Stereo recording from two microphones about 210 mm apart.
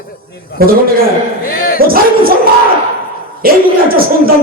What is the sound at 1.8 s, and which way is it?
Dog, 45° right (ahead or behind).